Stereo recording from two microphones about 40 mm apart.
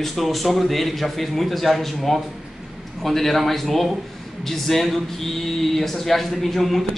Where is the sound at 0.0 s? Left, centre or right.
Centre.